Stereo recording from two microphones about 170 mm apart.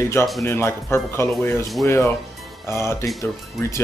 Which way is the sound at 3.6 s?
Centre (ahead or behind).